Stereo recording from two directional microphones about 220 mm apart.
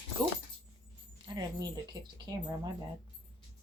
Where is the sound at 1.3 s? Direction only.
20° right (ahead or behind).